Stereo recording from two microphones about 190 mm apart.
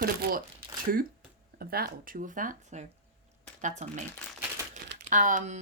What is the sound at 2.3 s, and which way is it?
Speech, 45° right (ahead or behind).